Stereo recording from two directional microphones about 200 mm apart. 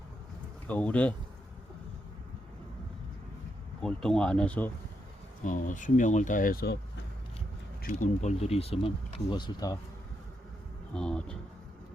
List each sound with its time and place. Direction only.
0.7 s speech: 5° left (ahead or behind)
3.8 s speech: 5° left (ahead or behind)
5.4 s speech: 40° left (ahead or behind)
7.8 s speech: 40° left (ahead or behind); by 9.7 s 20° left (ahead or behind)
10.9 s speech: 5° left (ahead or behind)